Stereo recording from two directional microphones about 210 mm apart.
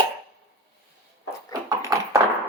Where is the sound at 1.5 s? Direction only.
15° right (ahead or behind).